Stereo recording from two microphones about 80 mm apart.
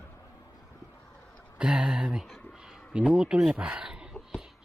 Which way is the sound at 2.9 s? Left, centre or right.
Centre.